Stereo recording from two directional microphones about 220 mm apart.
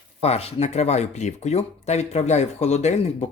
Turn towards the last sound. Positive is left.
turn(degrees=30)  # may be behind; listen again after turning